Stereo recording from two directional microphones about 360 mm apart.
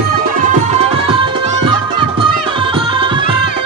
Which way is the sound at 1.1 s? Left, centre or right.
Centre.